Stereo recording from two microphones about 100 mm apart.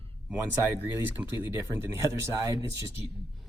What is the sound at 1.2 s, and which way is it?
Speech, 20° right (ahead or behind).